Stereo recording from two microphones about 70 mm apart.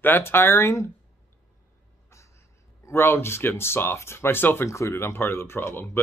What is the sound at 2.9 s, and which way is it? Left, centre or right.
Speech, left.